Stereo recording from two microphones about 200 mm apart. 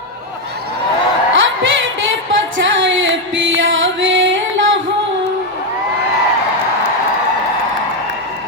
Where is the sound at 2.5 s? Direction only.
70° right (ahead or behind).